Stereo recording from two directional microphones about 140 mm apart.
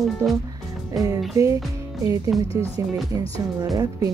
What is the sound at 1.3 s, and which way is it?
Speech, 25° right (ahead or behind).